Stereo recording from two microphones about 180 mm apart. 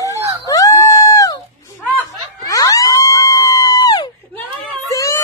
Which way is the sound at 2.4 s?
20° left (ahead or behind).